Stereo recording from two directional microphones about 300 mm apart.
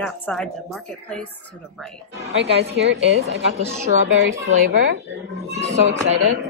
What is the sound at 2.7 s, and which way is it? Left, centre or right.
Speech, right.